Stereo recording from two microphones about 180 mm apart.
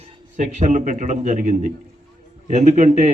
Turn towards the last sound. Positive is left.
turn(degrees=-40)  # may be behind; listen again after turning